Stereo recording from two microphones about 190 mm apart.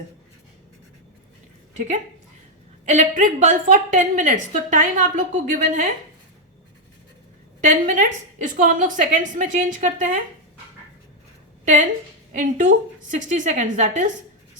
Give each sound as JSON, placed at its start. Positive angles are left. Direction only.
{"t": 2.9, "sound": "a woman's voice", "side_deg": -40}
{"t": 7.6, "sound": "a woman's voice", "side_deg": -40}
{"t": 11.6, "sound": "a woman's voice", "side_deg": -40}